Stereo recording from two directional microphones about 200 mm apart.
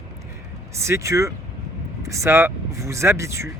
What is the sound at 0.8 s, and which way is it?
Speech, 15° right (ahead or behind).